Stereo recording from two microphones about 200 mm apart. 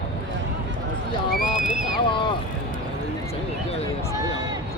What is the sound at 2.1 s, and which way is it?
Vehicle, 25° left (ahead or behind).